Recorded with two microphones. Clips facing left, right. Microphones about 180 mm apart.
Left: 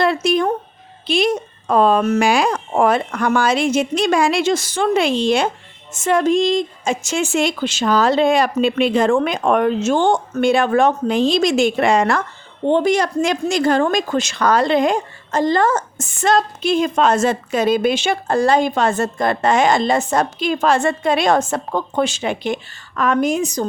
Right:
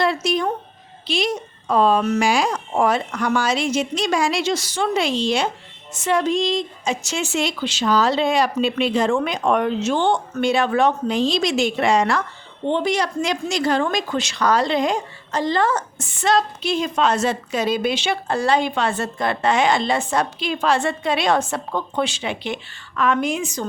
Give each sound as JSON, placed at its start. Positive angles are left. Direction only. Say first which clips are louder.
{"t": 0.0, "sound": "a woman's voice", "louder": "left 4 dB", "side_deg": 55}